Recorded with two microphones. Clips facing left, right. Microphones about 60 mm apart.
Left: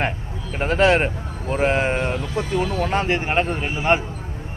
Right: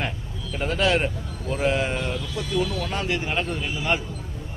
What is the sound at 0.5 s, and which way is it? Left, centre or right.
Speech, left.